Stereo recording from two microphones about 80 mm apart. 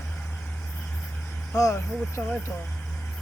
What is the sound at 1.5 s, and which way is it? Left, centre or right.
Speech, left.